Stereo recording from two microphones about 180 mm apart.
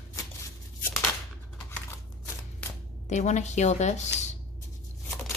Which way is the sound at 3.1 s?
40° left (ahead or behind).